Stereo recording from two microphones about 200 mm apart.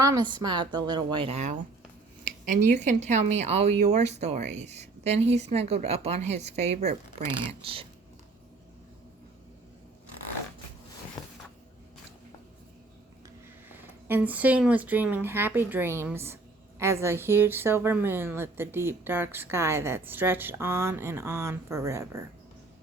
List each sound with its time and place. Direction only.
0.0 s a woman's voice: 20° right (ahead or behind)
2.2 s a sound: 45° right (ahead or behind)
2.7 s a woman's voice: 35° right (ahead or behind)
13.7 s speech: 10° right (ahead or behind)